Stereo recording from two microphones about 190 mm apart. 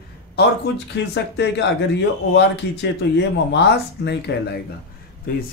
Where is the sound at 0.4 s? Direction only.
60° left (ahead or behind).